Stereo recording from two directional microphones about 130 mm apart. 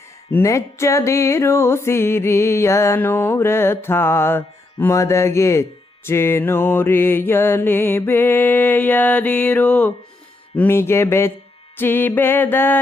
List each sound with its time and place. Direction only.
0.3 s music: 20° left (ahead or behind)
6.1 s mantra: 20° left (ahead or behind)
10.5 s music: 15° left (ahead or behind)
11.8 s mantra: 15° left (ahead or behind)